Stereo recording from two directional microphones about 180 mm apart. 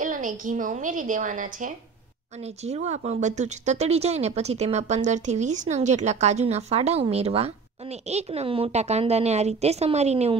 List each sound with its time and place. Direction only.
0.0 s a woman's voice: 45° right (ahead or behind)